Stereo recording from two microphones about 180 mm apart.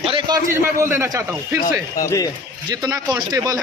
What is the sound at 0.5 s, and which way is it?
Speech, 10° right (ahead or behind).